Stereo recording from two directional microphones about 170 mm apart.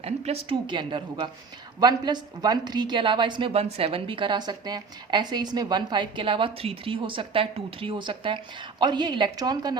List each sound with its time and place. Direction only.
0.0 s a woman's voice: 40° right (ahead or behind)